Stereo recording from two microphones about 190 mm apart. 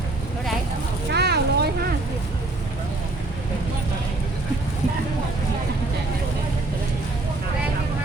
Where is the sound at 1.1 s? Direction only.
60° right (ahead or behind).